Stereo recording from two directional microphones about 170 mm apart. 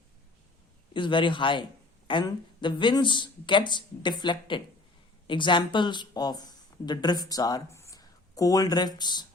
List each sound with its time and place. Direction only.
0.9 s a woman's voice: 30° left (ahead or behind)